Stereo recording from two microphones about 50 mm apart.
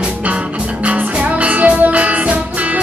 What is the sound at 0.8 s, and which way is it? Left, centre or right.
Music, right.